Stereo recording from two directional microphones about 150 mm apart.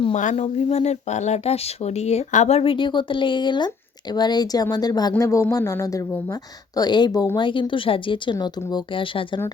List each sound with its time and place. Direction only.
0.1 s a woman's voice: 55° left (ahead or behind); by 9.4 s 35° left (ahead or behind)